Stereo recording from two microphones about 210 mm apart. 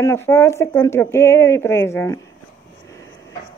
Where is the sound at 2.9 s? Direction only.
15° left (ahead or behind).